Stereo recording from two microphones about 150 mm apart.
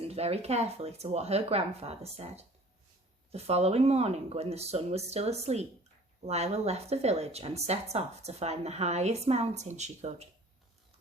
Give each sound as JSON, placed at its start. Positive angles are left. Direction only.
{"t": 0.0, "sound": "speech", "side_deg": -45}